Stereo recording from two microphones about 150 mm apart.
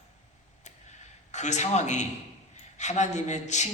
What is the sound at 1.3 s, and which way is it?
A man's voice, 50° left (ahead or behind).